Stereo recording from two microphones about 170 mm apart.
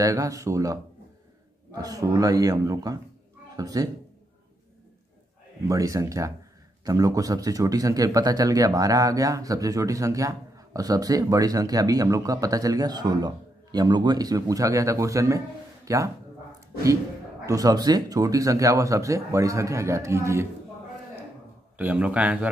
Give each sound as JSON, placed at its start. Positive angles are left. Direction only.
{"t": 0.0, "sound": "speech", "side_deg": -20}
{"t": 5.7, "sound": "speech", "side_deg": -20}
{"t": 17.5, "sound": "speech", "side_deg": -20}
{"t": 21.7, "sound": "speech", "side_deg": -10}